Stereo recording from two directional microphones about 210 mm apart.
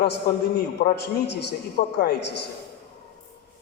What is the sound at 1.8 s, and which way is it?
Speech, 40° left (ahead or behind).